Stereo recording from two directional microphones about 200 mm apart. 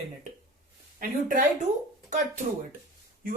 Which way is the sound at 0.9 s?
40° right (ahead or behind).